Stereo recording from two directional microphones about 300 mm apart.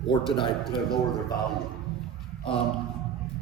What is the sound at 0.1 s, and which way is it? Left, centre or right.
Speech, centre.